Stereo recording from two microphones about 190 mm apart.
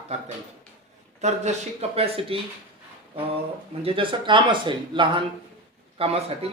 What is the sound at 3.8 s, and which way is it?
Speech, 30° right (ahead or behind).